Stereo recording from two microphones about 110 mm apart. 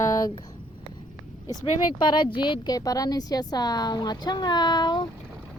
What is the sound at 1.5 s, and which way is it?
A woman's voice, 40° left (ahead or behind).